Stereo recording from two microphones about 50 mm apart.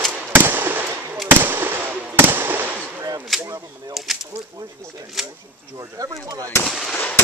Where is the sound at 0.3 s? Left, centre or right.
Right.